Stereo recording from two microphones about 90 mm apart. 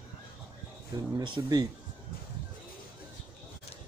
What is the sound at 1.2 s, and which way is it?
Speech, 55° right (ahead or behind).